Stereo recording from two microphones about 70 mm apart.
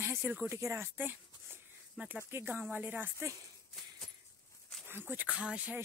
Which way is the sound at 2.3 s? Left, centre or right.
Right.